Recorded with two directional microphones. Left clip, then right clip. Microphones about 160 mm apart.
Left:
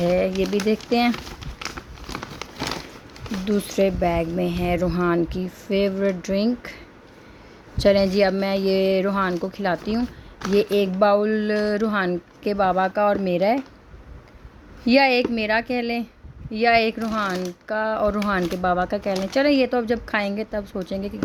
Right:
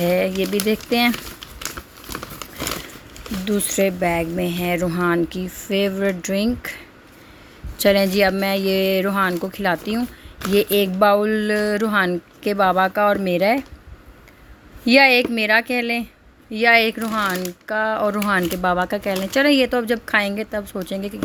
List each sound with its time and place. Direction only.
0.0 s speech: 5° right (ahead or behind)
2.1 s crumpling: 20° left (ahead or behind)
3.4 s speech: 5° right (ahead or behind)
14.8 s speech: 5° right (ahead or behind)